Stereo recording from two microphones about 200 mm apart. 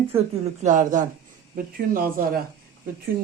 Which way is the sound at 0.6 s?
40° right (ahead or behind).